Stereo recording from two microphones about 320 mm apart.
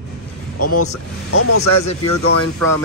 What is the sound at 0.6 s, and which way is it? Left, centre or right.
Speech, left.